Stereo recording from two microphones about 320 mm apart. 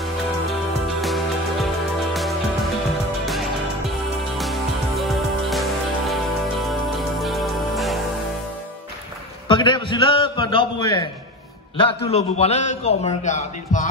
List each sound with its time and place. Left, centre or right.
1.0 s music: centre
4.4 s music: centre
9.5 s a man's voice: centre